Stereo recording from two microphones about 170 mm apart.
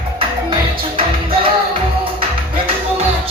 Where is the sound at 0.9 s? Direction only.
30° right (ahead or behind).